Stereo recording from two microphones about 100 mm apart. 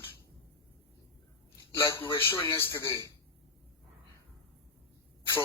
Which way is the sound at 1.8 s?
25° left (ahead or behind).